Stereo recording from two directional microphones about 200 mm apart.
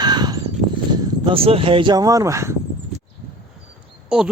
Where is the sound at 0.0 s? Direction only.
20° right (ahead or behind).